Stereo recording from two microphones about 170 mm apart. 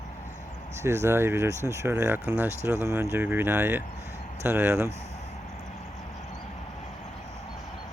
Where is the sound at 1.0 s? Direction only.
15° right (ahead or behind).